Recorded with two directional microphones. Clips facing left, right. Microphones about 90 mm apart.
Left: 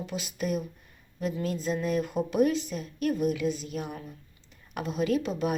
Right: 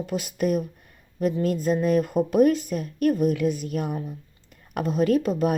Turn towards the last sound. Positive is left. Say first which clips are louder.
# right 6 dB
turn(degrees=-45)  # may be behind; listen again after turning